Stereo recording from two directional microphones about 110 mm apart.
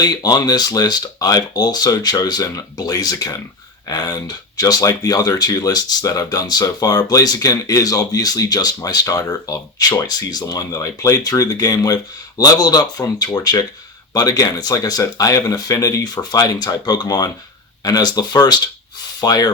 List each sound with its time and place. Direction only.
0.0 s speech: 35° left (ahead or behind)